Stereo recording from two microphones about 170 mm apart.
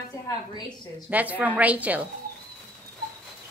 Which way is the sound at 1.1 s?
10° right (ahead or behind).